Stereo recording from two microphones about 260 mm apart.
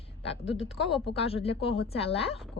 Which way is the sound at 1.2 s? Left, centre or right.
Left.